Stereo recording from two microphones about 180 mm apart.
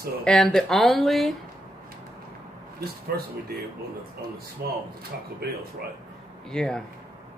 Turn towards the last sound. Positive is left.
turn(degrees=5)  # may be behind; listen again after turning